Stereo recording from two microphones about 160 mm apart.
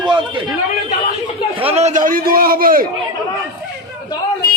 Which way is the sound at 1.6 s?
40° right (ahead or behind).